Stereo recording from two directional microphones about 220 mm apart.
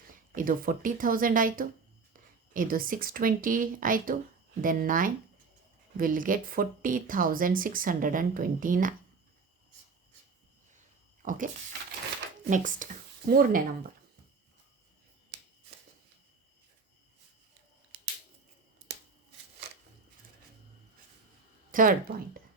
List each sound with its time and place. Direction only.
0.3 s speech: 40° right (ahead or behind)
11.2 s speech: 35° right (ahead or behind)
12.5 s speech: 35° right (ahead or behind)
21.7 s speech: 40° right (ahead or behind)